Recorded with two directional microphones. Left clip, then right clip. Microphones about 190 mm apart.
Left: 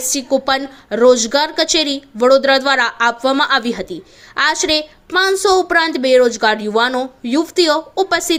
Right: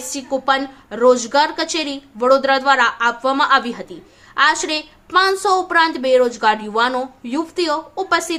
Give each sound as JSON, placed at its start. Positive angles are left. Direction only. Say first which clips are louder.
{"t": 0.1, "sound": "a woman's voice", "louder": "left 2 dB", "side_deg": 25}